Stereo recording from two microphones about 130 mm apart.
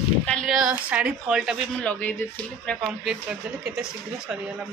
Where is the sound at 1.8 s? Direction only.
10° left (ahead or behind).